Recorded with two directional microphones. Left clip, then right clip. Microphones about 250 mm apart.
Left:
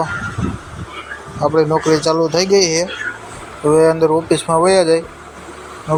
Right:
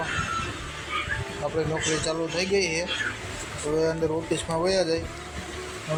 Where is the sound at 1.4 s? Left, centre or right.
Left.